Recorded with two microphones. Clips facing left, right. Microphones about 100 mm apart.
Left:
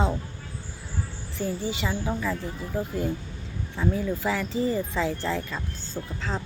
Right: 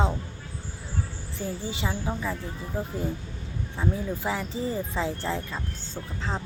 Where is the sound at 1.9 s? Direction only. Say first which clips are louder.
Left 1 dB; 15° right (ahead or behind).